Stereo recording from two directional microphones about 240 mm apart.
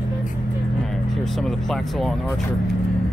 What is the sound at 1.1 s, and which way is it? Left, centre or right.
Speech, centre.